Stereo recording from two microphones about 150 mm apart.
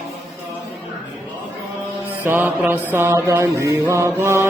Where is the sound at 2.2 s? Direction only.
15° right (ahead or behind).